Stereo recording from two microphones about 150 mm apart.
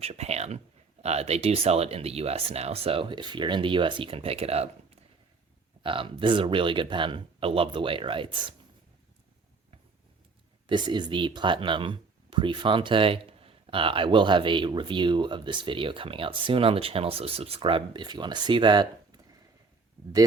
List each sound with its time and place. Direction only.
0.0 s speech: 45° right (ahead or behind)
10.7 s speech: 30° right (ahead or behind)